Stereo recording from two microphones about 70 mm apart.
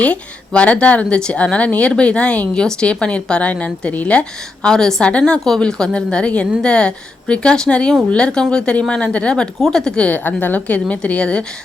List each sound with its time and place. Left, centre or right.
0.0 s speech: centre